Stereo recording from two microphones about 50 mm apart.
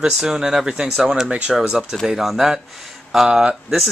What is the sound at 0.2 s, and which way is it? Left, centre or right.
Speech, centre.